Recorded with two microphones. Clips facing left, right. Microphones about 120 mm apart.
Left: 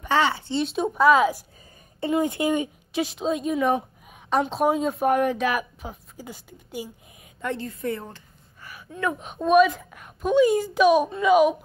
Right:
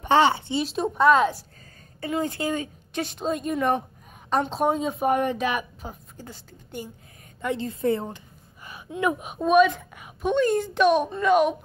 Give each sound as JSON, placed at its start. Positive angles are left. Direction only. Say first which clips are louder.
{"t": 0.0, "sound": "speech", "louder": "right 3 dB", "side_deg": -25}
{"t": 0.5, "sound": "speech", "louder": "left 1 dB", "side_deg": 0}
{"t": 2.0, "sound": "speech", "louder": "left 4 dB", "side_deg": 20}
{"t": 2.9, "sound": "speech", "louder": "left 2 dB", "side_deg": 5}
{"t": 7.5, "sound": "speech", "louder": "right 7 dB", "side_deg": -25}
{"t": 8.6, "sound": "gasp", "louder": "right 2 dB", "side_deg": -20}
{"t": 9.3, "sound": "speech", "louder": "left 1 dB", "side_deg": 0}